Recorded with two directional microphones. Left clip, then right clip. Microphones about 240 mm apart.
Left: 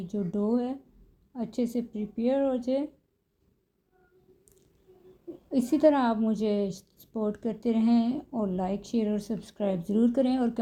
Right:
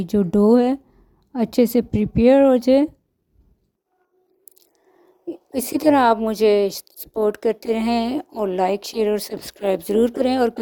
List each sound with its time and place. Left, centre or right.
0.0 s a woman's voice: right
5.5 s a woman's voice: right